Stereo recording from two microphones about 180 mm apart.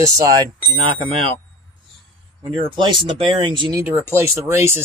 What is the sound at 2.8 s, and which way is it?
Speech, 25° right (ahead or behind).